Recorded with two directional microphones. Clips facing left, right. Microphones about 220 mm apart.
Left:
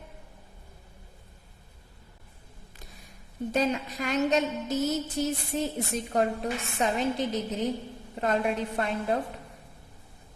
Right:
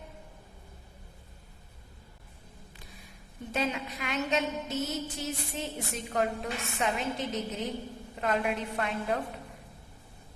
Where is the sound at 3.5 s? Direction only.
40° left (ahead or behind).